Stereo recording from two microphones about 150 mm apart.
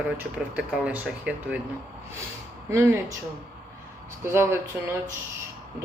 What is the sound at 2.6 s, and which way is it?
Speech, 15° right (ahead or behind).